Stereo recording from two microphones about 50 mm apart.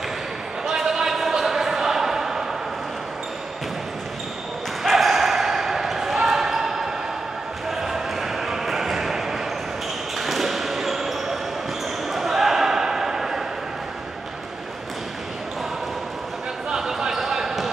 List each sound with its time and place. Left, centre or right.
0.7 s basketball bounce: centre
4.8 s basketball bounce: centre
7.7 s a sound: centre
10.1 s basketball bounce: centre
16.7 s basketball bounce: centre